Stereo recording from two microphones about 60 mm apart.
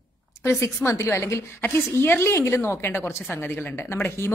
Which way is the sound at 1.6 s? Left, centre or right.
Left.